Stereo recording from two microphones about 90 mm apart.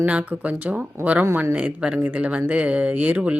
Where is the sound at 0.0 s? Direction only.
15° right (ahead or behind).